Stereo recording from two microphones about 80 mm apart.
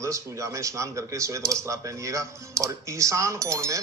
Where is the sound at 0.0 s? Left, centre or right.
Right.